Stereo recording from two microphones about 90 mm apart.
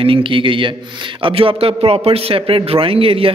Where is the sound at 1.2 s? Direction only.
80° right.